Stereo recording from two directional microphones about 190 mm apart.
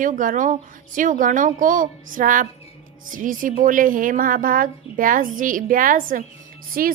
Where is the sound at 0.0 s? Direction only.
45° right (ahead or behind).